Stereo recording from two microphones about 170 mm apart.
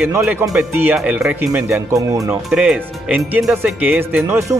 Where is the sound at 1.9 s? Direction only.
20° right (ahead or behind).